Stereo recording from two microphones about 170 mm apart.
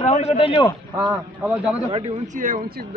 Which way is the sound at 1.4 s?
10° right (ahead or behind).